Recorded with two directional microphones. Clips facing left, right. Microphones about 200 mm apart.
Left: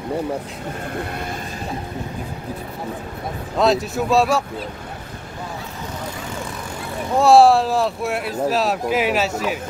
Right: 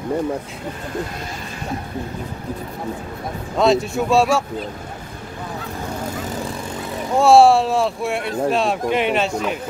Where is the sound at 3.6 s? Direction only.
Centre (ahead or behind).